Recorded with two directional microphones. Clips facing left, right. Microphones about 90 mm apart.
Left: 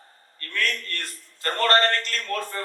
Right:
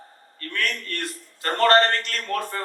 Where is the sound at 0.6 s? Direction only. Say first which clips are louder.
Even; 20° right (ahead or behind).